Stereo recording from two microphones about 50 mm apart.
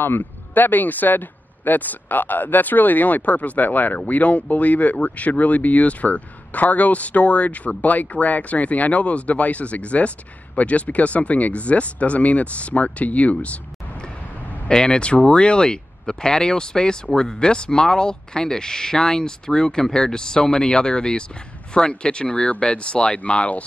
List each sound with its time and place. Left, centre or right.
0.0 s speech: left
14.7 s speech: centre